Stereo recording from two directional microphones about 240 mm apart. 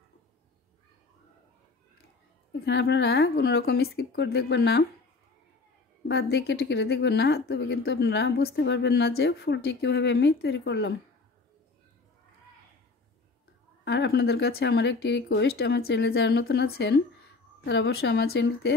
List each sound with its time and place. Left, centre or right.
2.6 s speech: left
6.0 s speech: left
13.8 s speech: left